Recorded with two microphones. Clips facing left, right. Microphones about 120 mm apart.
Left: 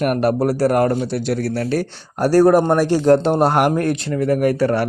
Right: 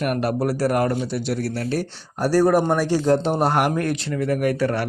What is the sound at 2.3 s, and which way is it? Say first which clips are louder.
Speech: left 5 dB; 60° left (ahead or behind).